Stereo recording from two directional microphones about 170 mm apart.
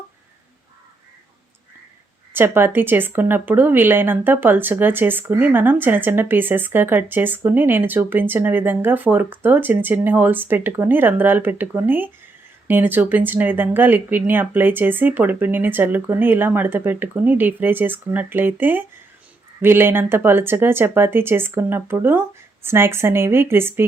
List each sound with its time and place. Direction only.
2.3 s speech: 10° right (ahead or behind)